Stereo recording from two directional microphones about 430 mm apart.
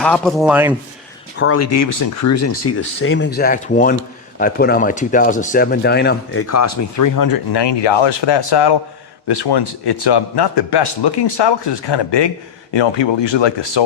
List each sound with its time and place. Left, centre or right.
0.0 s a man's voice: centre
1.4 s speech: left
6.5 s speech: left
12.7 s speech: left